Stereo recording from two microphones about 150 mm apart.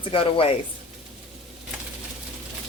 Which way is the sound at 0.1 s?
35° left (ahead or behind).